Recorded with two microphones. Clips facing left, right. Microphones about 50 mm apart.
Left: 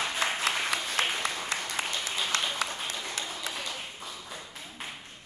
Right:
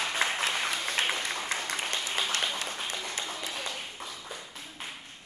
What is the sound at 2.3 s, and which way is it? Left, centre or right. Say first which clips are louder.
Applause: left 3 dB; left.